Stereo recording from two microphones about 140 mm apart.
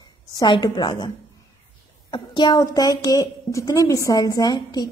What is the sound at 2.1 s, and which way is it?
A woman's voice, 30° left (ahead or behind).